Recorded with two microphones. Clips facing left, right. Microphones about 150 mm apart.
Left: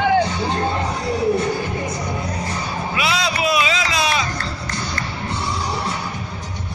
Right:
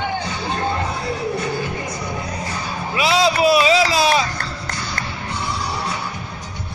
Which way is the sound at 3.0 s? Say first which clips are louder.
Right 6 dB; 30° right (ahead or behind).